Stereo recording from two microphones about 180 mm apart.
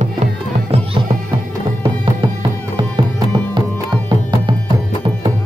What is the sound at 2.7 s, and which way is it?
Music, 25° right (ahead or behind).